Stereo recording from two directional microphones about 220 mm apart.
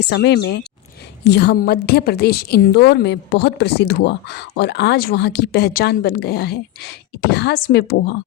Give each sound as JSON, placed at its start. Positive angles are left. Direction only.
{"t": 0.0, "sound": "a woman's voice", "side_deg": 50}